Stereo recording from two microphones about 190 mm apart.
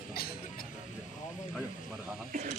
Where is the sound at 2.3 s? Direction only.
40° right (ahead or behind).